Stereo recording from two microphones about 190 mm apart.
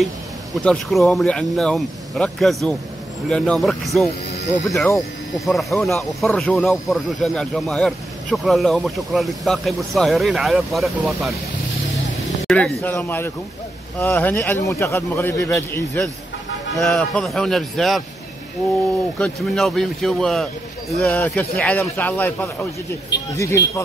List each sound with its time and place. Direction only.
0.6 s speech: 5° left (ahead or behind)
19.1 s speech: 5° left (ahead or behind)